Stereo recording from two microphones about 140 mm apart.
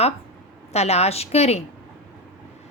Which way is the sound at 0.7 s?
50° left (ahead or behind).